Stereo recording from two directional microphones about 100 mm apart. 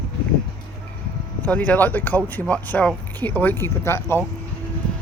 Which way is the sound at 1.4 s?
15° left (ahead or behind).